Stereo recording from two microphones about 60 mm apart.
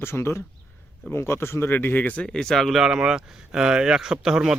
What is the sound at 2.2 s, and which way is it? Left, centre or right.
Speech, centre.